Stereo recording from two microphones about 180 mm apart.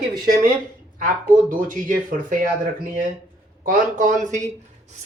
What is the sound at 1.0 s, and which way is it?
Speech, 50° right (ahead or behind).